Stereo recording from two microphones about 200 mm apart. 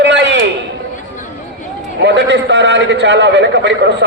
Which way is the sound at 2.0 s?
60° right (ahead or behind).